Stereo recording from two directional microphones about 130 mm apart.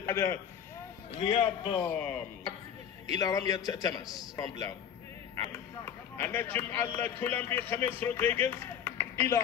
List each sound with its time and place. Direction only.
0.0 s a man's voice: 20° left (ahead or behind)
1.2 s a man's voice: 45° left (ahead or behind)
3.1 s a man's voice: 30° left (ahead or behind)